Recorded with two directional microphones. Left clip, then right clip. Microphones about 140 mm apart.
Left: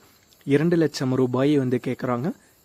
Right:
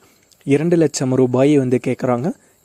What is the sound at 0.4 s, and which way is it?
Speech, 40° right (ahead or behind).